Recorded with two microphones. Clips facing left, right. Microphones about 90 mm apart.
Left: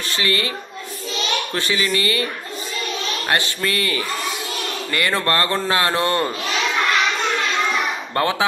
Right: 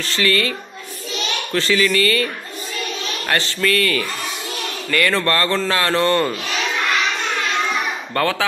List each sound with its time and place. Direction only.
0.1 s speech: 20° left (ahead or behind)
1.5 s speech: 20° left (ahead or behind)
3.3 s a man's voice: 20° left (ahead or behind)
8.1 s speech: 20° left (ahead or behind)